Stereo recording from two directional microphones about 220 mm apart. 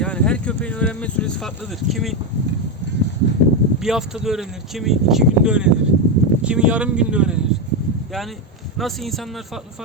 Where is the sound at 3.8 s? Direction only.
Centre (ahead or behind).